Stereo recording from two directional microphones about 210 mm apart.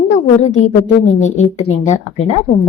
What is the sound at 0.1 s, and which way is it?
A woman's voice, 35° left (ahead or behind).